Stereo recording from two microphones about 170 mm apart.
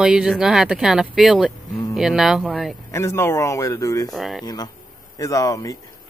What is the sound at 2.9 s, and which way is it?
Speech, 15° left (ahead or behind).